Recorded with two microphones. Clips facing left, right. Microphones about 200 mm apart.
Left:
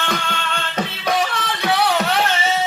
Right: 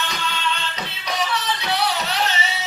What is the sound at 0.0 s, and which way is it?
Music, 55° left (ahead or behind).